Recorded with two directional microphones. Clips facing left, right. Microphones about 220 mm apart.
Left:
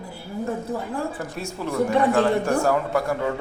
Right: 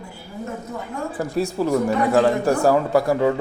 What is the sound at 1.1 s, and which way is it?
Speech, 35° right (ahead or behind).